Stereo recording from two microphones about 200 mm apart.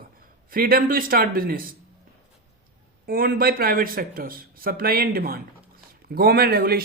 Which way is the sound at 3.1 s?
45° right (ahead or behind).